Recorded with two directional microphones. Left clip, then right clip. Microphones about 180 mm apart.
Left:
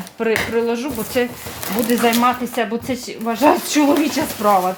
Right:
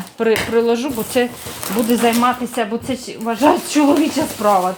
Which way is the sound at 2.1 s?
20° right (ahead or behind).